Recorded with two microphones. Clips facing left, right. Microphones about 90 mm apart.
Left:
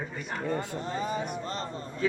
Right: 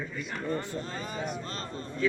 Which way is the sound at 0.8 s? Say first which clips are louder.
Left 5 dB; 20° left (ahead or behind).